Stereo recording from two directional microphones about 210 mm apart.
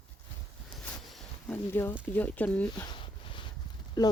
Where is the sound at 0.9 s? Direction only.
5° left (ahead or behind).